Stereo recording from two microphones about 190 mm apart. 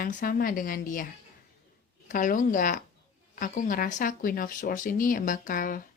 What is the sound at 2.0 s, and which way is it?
Speech, 45° left (ahead or behind).